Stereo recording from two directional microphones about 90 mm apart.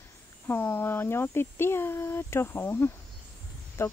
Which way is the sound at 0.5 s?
25° left (ahead or behind).